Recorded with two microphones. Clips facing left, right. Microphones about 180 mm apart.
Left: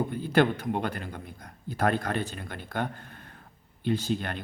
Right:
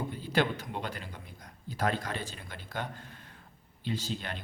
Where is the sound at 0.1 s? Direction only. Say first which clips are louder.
Left 4 dB; 55° left (ahead or behind).